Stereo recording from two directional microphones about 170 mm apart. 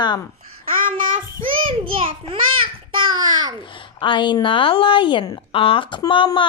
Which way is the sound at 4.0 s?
30° left (ahead or behind).